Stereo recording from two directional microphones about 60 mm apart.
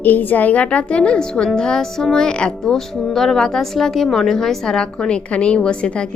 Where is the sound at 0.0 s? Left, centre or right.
Left.